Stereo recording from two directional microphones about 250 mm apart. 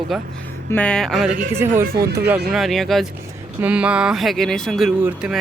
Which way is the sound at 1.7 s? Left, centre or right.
Right.